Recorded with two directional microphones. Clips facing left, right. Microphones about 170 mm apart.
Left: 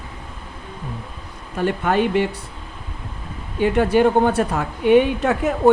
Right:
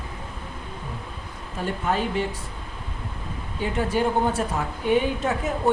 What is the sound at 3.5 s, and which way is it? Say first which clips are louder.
Speech: left 8 dB; 70° left (ahead or behind).